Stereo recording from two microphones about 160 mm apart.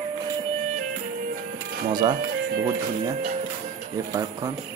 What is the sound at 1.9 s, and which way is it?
Speech, 25° right (ahead or behind).